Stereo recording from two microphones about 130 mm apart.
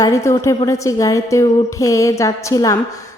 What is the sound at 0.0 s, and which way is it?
A woman's voice, 25° left (ahead or behind).